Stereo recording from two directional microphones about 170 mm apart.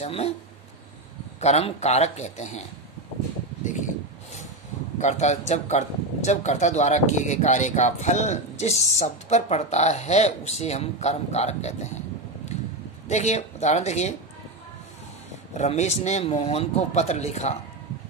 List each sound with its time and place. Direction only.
0.0 s speech: 35° left (ahead or behind)
1.4 s a man's voice: 40° left (ahead or behind)
5.0 s a man's voice: 40° left (ahead or behind)
13.1 s a man's voice: 40° left (ahead or behind)
15.5 s a man's voice: 40° left (ahead or behind)